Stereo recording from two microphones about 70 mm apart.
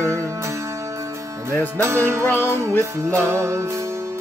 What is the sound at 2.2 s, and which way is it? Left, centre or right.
Music, left.